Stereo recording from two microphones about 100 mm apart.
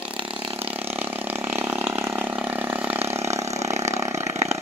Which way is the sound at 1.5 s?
20° right (ahead or behind).